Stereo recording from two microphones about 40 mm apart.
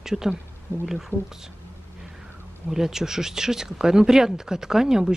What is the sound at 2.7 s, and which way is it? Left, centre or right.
Speech, centre.